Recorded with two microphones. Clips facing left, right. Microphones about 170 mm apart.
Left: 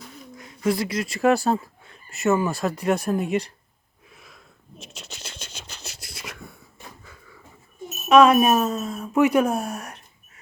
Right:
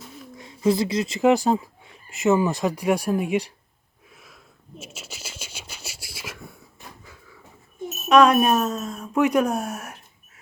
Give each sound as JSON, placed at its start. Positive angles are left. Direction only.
{"t": 0.0, "sound": "a sound", "side_deg": 0}
{"t": 0.3, "sound": "speech", "side_deg": -25}
{"t": 4.1, "sound": "scratch", "side_deg": 0}
{"t": 7.9, "sound": "speech", "side_deg": 0}